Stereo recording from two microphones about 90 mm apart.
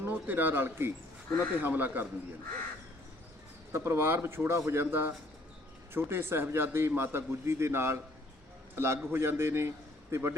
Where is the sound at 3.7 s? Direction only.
30° right (ahead or behind).